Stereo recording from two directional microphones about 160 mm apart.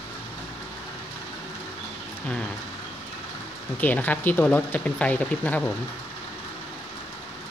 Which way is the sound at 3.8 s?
10° left (ahead or behind).